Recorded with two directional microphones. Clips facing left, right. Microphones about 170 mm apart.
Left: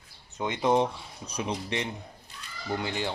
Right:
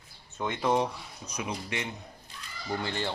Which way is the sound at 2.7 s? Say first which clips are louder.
Left 1 dB; 15° left (ahead or behind).